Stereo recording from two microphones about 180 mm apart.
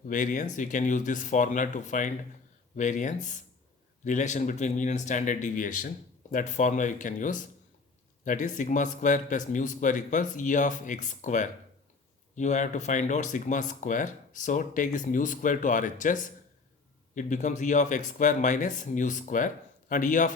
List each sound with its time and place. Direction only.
0.1 s speech: 45° left (ahead or behind)